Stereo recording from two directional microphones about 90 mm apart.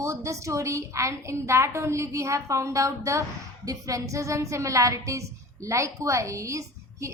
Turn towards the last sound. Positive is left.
turn(degrees=-35)  # may be behind; listen again after turning